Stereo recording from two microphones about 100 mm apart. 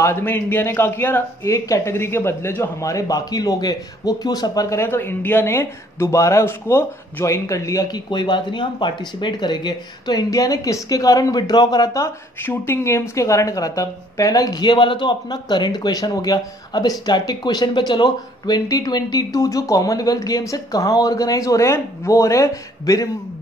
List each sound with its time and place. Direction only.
0.0 s a man's voice: 25° left (ahead or behind)
2.8 s speech: 35° left (ahead or behind)
8.1 s speech: 50° left (ahead or behind); by 12.1 s 35° left (ahead or behind)
12.4 s speech: 20° left (ahead or behind)